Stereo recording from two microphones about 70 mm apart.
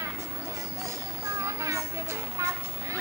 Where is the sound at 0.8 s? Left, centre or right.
Right.